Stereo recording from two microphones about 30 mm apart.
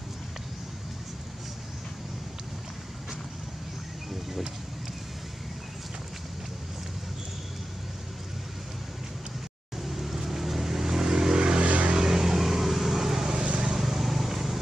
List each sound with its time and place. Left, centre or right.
9.8 s vehicle: centre; by 11.4 s right
11.4 s vehicle: right
11.9 s vehicle: centre